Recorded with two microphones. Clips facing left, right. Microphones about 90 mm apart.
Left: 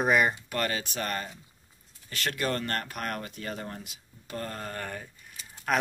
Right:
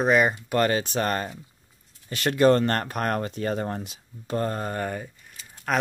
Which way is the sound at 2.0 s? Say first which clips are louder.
Right 7 dB; 25° right (ahead or behind).